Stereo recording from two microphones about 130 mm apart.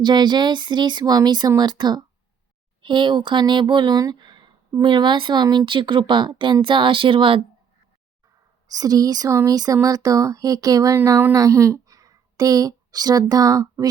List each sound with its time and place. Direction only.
0.0 s speech: 35° right (ahead or behind)
8.6 s speech: 30° right (ahead or behind)